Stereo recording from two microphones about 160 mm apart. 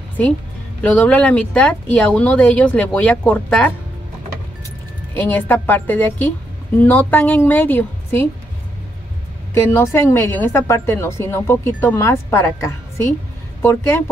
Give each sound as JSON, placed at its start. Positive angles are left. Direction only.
{"t": 0.8, "sound": "a woman's voice", "side_deg": 10}
{"t": 5.1, "sound": "a woman's voice", "side_deg": 10}
{"t": 9.5, "sound": "a woman's voice", "side_deg": 15}